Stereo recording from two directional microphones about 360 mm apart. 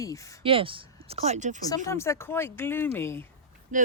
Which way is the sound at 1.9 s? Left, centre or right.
Centre.